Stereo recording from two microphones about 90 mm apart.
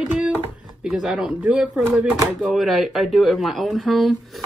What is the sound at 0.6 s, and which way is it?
Speech, 5° right (ahead or behind).